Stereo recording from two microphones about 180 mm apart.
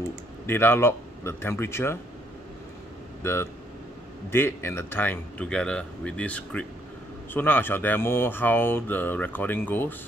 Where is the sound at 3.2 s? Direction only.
15° left (ahead or behind).